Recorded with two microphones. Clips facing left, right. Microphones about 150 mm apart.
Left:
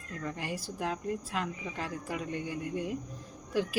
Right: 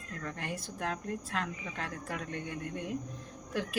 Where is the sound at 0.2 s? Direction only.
10° left (ahead or behind).